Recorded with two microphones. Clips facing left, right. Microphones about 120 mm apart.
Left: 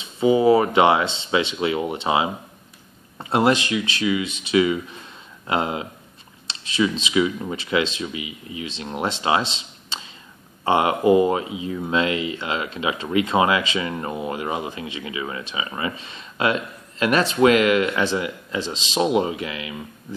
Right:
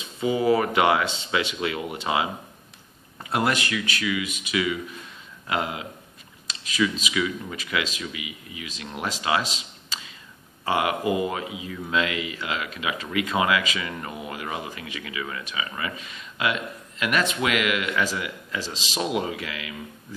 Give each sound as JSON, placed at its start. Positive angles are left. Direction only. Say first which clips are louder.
{"t": 0.0, "sound": "speech", "louder": "left 6 dB", "side_deg": 25}